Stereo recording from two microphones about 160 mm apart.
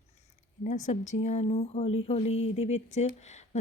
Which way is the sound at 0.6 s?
50° left (ahead or behind).